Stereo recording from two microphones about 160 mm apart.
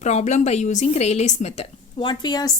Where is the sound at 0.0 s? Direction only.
45° left (ahead or behind).